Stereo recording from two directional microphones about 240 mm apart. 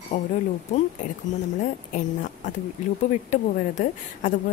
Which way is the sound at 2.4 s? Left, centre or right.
Left.